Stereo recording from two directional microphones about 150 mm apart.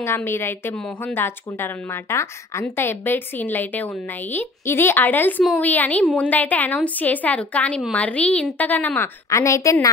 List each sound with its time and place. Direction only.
0.0 s a woman's voice: 15° left (ahead or behind)